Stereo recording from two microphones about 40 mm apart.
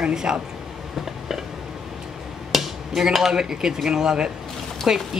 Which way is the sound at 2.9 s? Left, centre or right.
Centre.